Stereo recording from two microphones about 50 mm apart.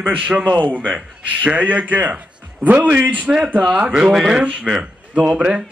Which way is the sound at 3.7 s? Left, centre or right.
Centre.